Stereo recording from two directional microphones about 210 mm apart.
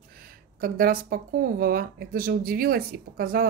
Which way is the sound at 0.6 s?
45° right (ahead or behind).